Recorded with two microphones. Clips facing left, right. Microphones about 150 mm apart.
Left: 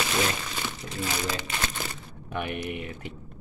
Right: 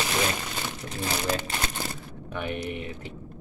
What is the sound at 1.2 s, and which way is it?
Speech, 45° right (ahead or behind).